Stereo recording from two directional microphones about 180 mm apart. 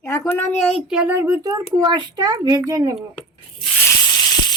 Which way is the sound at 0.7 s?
5° right (ahead or behind).